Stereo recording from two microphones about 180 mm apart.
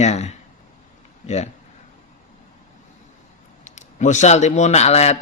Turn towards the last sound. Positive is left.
turn(degrees=35)  # may be behind; listen again after turning